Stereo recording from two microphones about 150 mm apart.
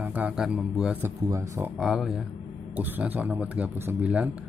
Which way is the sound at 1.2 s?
20° right (ahead or behind).